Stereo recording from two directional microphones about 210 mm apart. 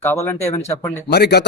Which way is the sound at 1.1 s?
50° left (ahead or behind).